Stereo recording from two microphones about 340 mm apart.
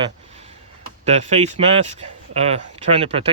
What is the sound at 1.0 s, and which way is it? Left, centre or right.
Speech, centre.